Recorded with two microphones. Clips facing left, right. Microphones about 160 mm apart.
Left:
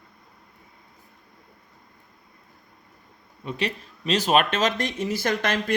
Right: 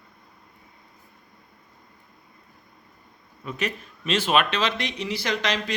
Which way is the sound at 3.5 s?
30° left (ahead or behind).